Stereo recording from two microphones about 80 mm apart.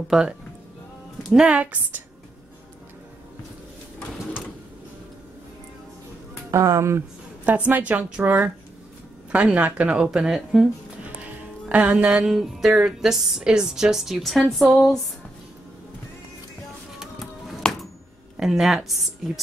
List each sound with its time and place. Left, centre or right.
0.1 s speech: centre
1.3 s speech: centre
6.5 s speech: right
7.4 s a woman's voice: centre
8.2 s a woman's voice: right
9.3 s speech: centre
11.7 s a woman's voice: centre
14.6 s speech: centre
17.0 s music: centre
18.4 s a woman's voice: centre